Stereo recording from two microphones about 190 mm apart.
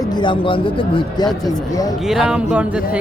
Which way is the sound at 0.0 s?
25° left (ahead or behind).